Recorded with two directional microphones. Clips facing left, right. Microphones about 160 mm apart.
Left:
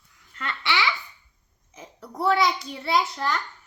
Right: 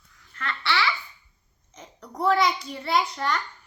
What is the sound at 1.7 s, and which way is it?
A child's voice, 10° left (ahead or behind).